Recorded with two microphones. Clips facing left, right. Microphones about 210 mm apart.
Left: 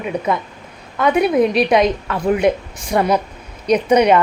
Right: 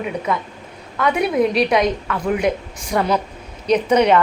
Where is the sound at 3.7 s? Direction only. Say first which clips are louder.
Left 2 dB; 15° left (ahead or behind).